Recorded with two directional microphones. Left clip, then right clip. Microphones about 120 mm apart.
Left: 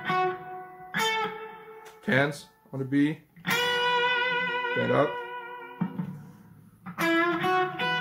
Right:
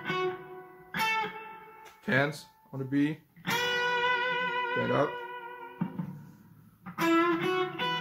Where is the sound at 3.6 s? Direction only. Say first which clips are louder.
Left 3 dB; 30° left (ahead or behind).